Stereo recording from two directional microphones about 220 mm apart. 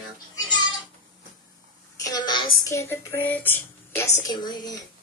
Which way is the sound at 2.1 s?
20° left (ahead or behind).